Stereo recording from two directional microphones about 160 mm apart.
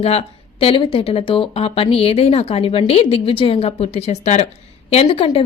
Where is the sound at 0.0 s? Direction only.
40° left (ahead or behind).